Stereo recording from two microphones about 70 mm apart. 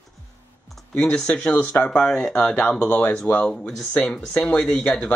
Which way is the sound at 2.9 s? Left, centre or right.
Left.